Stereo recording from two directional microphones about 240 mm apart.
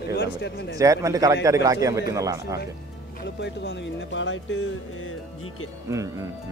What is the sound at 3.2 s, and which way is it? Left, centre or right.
Speech, left.